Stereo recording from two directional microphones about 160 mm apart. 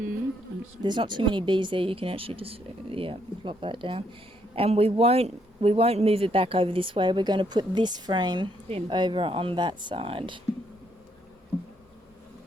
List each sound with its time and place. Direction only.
0.8 s a man's voice: 30° right (ahead or behind)